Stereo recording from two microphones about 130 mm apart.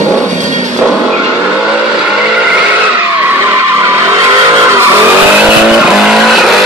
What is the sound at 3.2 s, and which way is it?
Vehicle, 20° right (ahead or behind).